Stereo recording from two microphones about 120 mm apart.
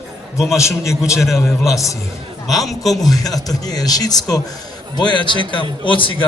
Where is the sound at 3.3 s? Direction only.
30° left (ahead or behind).